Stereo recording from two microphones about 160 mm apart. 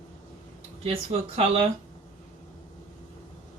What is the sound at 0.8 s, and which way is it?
Speech, 35° right (ahead or behind).